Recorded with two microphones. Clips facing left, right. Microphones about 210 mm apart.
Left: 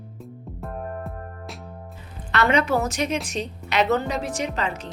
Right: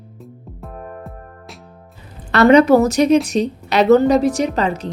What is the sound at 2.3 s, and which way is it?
A woman's voice, 40° right (ahead or behind).